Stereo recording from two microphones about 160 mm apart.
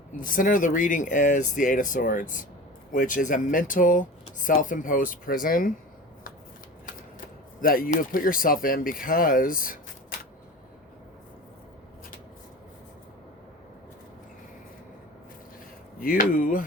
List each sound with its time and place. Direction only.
0.2 s speech: 60° left (ahead or behind)
7.6 s speech: 65° left (ahead or behind)
16.0 s speech: 60° left (ahead or behind)